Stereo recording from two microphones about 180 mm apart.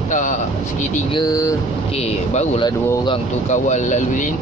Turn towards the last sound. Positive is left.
turn(degrees=40)  # may be behind; listen again after turning